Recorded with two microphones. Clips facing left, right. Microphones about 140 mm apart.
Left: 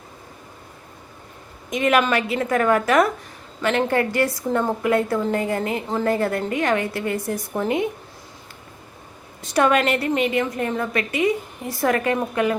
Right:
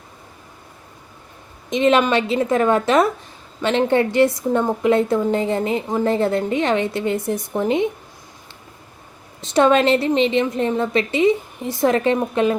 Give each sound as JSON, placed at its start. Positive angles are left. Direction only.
{"t": 1.7, "sound": "a woman's voice", "side_deg": -25}
{"t": 9.4, "sound": "a woman's voice", "side_deg": -25}